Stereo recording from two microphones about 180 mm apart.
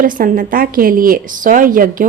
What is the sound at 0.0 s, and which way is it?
A woman's voice, 50° right (ahead or behind).